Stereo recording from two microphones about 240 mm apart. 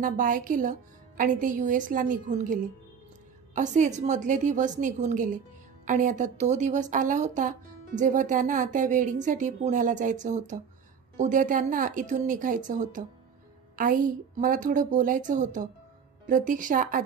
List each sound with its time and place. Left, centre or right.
0.0 s speech: right